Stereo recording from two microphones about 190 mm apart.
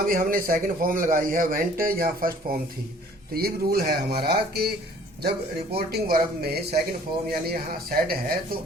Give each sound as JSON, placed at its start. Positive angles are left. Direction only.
{"t": 0.0, "sound": "speech", "side_deg": -50}
{"t": 5.7, "sound": "speech", "side_deg": -55}